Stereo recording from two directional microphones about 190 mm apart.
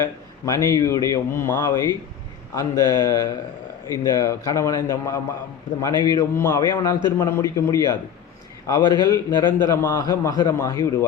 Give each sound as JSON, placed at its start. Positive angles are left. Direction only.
{"t": 0.0, "sound": "a man's voice", "side_deg": 15}
{"t": 9.5, "sound": "a man's voice", "side_deg": 10}